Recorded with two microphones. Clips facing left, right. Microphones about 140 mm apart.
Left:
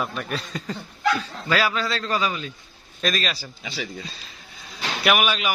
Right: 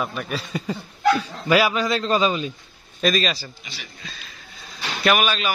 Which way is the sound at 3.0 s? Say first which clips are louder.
Right 5 dB; centre (ahead or behind).